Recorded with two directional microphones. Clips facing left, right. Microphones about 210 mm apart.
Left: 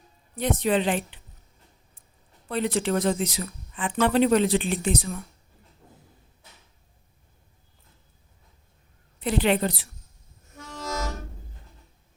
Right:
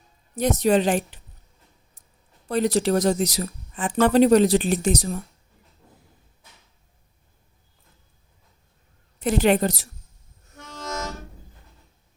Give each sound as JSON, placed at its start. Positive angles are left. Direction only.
{"t": 0.3, "sound": "a woman's voice", "side_deg": -40}
{"t": 2.5, "sound": "speech", "side_deg": -40}
{"t": 9.2, "sound": "a woman's voice", "side_deg": -45}